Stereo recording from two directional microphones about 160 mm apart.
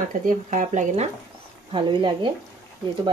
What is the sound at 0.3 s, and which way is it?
Speech, 50° right (ahead or behind).